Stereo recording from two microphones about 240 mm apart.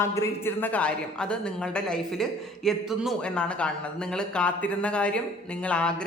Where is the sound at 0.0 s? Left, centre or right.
Centre.